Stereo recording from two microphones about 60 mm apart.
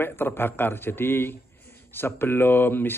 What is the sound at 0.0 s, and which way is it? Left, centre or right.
A man's voice, left.